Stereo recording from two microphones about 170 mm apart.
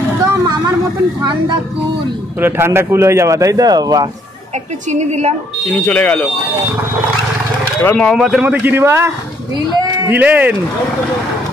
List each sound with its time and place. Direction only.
0.3 s vehicle: 20° right (ahead or behind)
2.4 s speech: 15° right (ahead or behind)
5.9 s speech: 5° left (ahead or behind)
7.8 s speech: 5° left (ahead or behind); by 10.5 s 10° right (ahead or behind)